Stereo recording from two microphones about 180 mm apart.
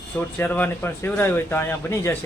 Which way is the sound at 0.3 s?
10° left (ahead or behind).